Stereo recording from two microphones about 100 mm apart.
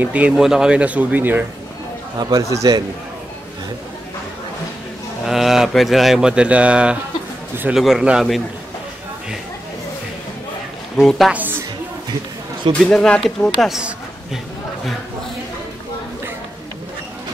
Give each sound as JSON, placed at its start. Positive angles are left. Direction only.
{"t": 0.0, "sound": "speech", "side_deg": -15}
{"t": 2.1, "sound": "a man's voice", "side_deg": -35}
{"t": 5.2, "sound": "speech", "side_deg": -5}
{"t": 11.0, "sound": "speech", "side_deg": 0}
{"t": 11.3, "sound": "music", "side_deg": -20}
{"t": 12.8, "sound": "speech", "side_deg": 5}
{"t": 13.6, "sound": "a sound", "side_deg": -5}